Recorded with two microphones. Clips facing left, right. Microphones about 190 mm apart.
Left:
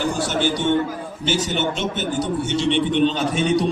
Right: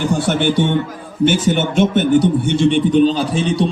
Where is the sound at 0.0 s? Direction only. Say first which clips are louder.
Right 5 dB; 60° right (ahead or behind).